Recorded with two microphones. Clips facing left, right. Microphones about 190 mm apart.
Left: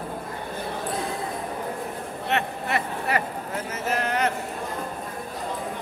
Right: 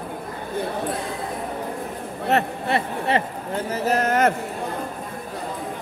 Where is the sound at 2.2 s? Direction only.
35° right (ahead or behind).